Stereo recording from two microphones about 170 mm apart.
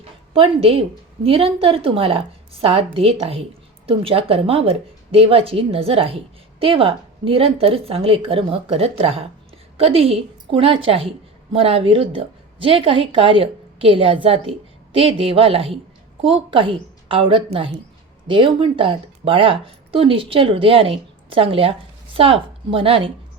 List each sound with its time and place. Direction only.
0.3 s a woman's voice: 35° right (ahead or behind)